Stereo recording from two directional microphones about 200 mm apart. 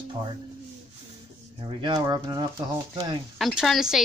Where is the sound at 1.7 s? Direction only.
20° right (ahead or behind).